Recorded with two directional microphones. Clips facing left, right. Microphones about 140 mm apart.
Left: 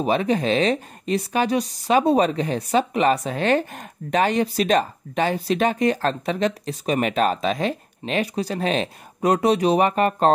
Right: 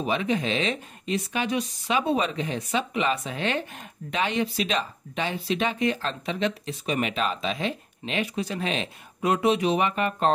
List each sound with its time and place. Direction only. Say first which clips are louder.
0.0 s speech: left 5 dB; 40° left (ahead or behind)